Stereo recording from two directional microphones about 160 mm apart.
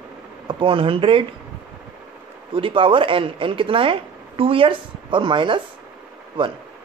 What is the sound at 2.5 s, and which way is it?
Speech, 30° right (ahead or behind).